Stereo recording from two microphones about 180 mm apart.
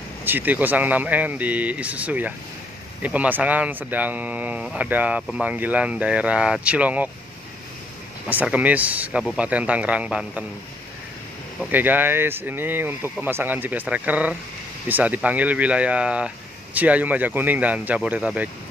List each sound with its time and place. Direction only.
0.2 s speech: 10° right (ahead or behind)
8.3 s speech: 10° right (ahead or behind)
11.7 s speech: 10° right (ahead or behind)